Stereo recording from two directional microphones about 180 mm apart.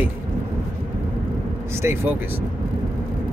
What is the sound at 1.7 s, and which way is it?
Speech, 15° right (ahead or behind).